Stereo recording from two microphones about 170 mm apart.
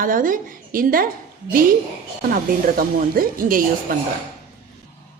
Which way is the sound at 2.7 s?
55° right (ahead or behind).